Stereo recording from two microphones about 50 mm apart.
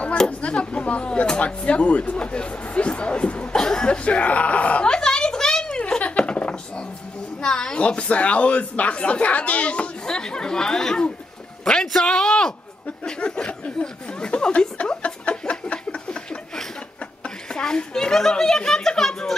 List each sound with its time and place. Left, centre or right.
0.3 s speech: left
4.8 s a sound: centre
7.4 s speech: centre
10.0 s a man's voice: centre
15.7 s a sound: left
17.2 s a woman's voice: centre